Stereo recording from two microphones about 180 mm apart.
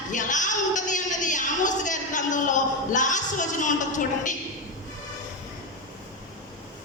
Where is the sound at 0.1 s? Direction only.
45° left (ahead or behind).